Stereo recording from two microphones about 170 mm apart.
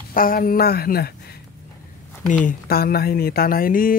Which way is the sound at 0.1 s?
55° left (ahead or behind).